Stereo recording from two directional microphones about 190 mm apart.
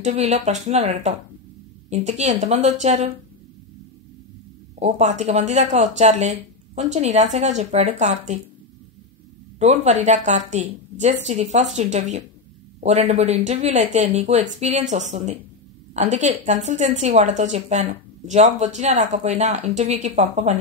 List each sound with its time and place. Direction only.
0.0 s a woman's voice: 35° right (ahead or behind)
4.7 s a woman's voice: 35° right (ahead or behind)
9.6 s a woman's voice: 35° right (ahead or behind)